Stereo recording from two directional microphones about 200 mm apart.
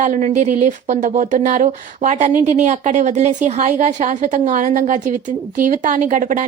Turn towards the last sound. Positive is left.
turn(degrees=-40)  # may be behind; listen again after turning